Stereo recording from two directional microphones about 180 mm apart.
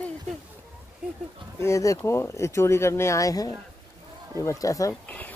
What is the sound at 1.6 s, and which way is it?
Speech, 15° left (ahead or behind).